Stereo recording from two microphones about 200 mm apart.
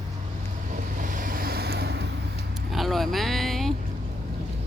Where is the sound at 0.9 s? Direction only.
40° right (ahead or behind).